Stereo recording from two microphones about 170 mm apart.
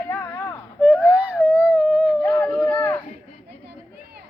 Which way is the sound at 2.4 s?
5° left (ahead or behind).